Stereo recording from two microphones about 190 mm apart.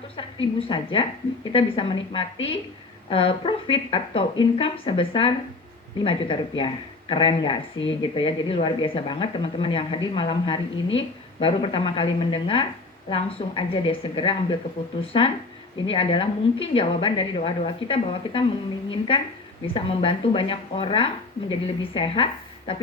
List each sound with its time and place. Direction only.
0.6 s speech: 30° left (ahead or behind)